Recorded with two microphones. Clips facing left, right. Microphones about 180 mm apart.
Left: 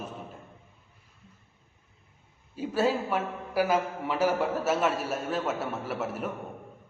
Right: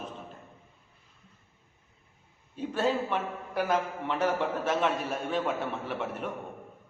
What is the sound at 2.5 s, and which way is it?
A man's voice, 5° left (ahead or behind).